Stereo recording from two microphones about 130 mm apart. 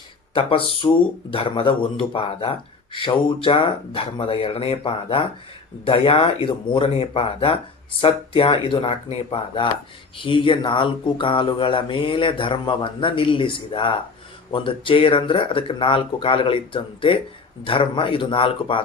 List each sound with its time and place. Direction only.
0.3 s speech: 45° left (ahead or behind)